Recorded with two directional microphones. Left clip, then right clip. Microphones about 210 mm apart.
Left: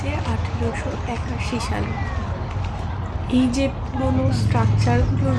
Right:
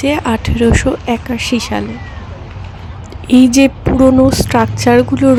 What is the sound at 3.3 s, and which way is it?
Speech, 50° right (ahead or behind).